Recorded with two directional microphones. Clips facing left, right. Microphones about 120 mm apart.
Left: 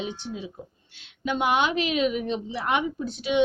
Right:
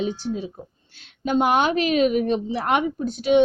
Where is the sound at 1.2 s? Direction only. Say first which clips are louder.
Right 4 dB; 40° right (ahead or behind).